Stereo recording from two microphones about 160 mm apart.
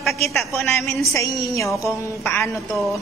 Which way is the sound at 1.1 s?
20° left (ahead or behind).